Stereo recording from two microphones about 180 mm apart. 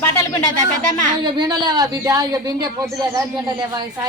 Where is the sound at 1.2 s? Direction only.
25° right (ahead or behind).